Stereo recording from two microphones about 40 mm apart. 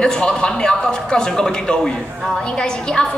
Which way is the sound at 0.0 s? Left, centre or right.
Left.